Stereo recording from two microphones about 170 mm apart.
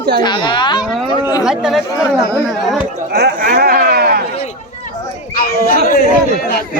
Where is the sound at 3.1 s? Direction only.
65° right (ahead or behind).